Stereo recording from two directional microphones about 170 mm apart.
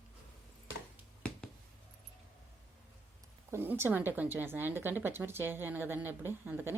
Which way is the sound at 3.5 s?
15° right (ahead or behind).